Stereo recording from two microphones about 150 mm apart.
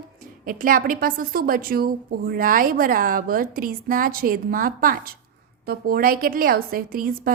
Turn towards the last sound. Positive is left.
turn(degrees=-70)  # may be behind; listen again after turning